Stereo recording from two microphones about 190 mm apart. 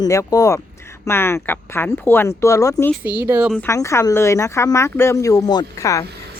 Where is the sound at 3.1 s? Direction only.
10° right (ahead or behind).